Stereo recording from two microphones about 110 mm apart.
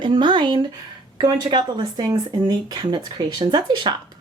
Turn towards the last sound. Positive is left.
turn(degrees=-40)  # may be behind; listen again after turning